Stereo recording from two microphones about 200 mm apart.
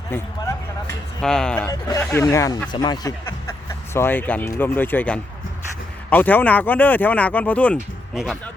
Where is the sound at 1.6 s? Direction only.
15° left (ahead or behind); by 8.4 s centre (ahead or behind).